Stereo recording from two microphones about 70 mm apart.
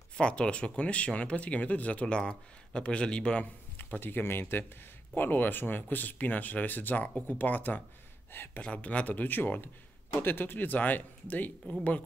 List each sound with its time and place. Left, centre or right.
0.2 s speech: centre
3.7 s speech: left
8.6 s speech: centre